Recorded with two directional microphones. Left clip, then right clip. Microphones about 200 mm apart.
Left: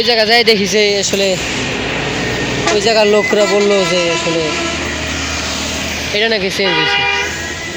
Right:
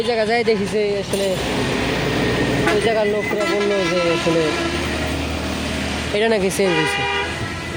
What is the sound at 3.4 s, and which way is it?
Speech, 55° left (ahead or behind).